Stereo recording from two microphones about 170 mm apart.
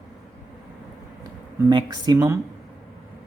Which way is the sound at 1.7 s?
25° right (ahead or behind).